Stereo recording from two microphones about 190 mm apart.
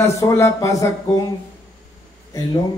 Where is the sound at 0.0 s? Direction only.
15° left (ahead or behind).